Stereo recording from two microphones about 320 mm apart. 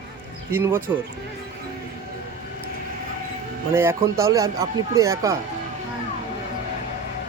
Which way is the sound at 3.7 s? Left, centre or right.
Centre.